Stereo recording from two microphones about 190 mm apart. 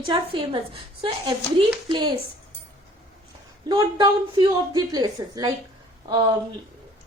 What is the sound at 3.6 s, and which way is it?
A woman's voice, 20° right (ahead or behind).